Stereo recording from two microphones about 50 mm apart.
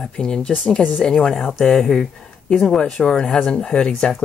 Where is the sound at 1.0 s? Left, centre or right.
Centre.